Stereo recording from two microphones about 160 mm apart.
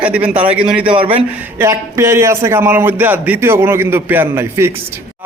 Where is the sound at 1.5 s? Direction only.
15° right (ahead or behind).